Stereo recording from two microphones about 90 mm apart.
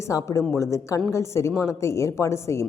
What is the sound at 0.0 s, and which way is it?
A woman's voice, 35° left (ahead or behind).